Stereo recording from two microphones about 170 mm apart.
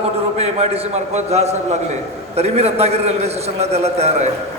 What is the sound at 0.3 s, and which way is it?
A man's voice, 40° right (ahead or behind).